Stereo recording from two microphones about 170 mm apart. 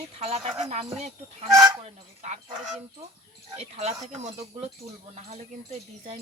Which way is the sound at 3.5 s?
40° right (ahead or behind).